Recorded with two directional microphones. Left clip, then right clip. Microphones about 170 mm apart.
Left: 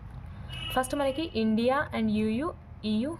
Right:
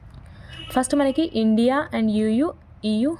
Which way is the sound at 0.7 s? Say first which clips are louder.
Right 7 dB; 35° right (ahead or behind).